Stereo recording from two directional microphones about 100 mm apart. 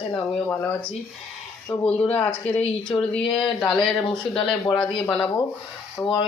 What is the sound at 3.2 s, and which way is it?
Speech, 60° left (ahead or behind).